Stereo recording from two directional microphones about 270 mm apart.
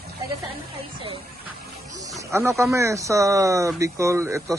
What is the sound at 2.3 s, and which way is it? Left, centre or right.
Speech, centre.